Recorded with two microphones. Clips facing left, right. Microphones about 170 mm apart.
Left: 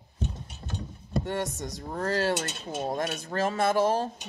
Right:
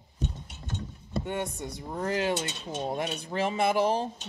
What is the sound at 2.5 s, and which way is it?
Speech, 5° left (ahead or behind).